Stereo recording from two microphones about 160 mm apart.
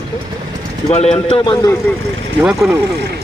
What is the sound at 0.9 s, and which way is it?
Speech, 40° left (ahead or behind).